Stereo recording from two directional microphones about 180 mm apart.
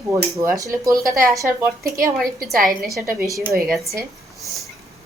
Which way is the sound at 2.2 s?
Centre (ahead or behind).